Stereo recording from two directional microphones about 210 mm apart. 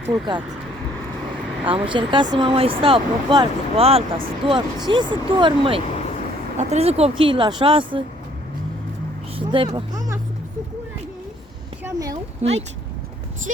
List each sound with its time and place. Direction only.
0.0 s speech: 20° right (ahead or behind)
1.6 s speech: 25° right (ahead or behind)
9.5 s speech: 25° right (ahead or behind)
11.9 s speech: 15° right (ahead or behind)
12.4 s speech: 30° right (ahead or behind)